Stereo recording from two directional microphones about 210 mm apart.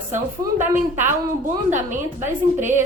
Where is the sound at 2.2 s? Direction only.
10° right (ahead or behind).